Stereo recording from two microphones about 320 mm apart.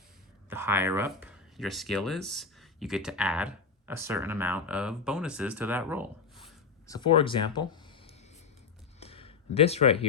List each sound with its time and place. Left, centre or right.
0.5 s speech: centre
6.8 s speech: centre
9.0 s a sound: centre